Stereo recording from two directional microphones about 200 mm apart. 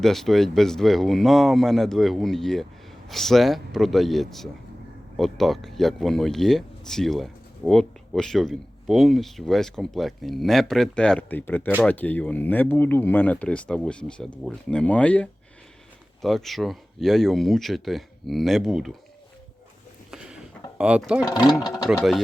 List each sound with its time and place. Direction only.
0.0 s speech: centre (ahead or behind)
20.1 s a sound: 5° right (ahead or behind)
21.2 s speech: 20° left (ahead or behind)